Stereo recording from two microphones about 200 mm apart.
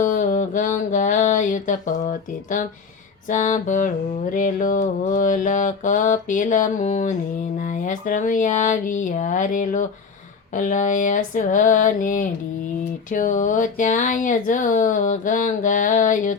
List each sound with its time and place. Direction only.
0.0 s mantra: 40° left (ahead or behind)
3.2 s speech: 40° left (ahead or behind)